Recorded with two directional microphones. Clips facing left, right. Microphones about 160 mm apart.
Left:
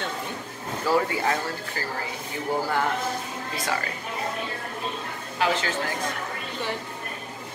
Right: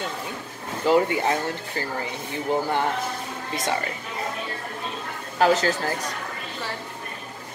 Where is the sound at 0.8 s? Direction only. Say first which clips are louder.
Right 4 dB; 20° right (ahead or behind).